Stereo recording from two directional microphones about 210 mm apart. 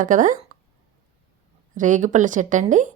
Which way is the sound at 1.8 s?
35° right (ahead or behind).